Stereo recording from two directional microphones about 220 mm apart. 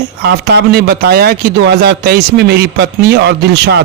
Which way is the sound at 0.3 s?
45° right (ahead or behind).